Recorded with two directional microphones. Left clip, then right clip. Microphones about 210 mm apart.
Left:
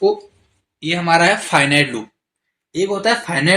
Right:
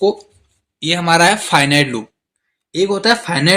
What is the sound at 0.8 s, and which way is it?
Speech, 50° right (ahead or behind).